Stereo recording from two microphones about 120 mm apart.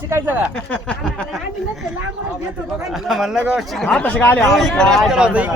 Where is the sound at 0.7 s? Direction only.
10° left (ahead or behind).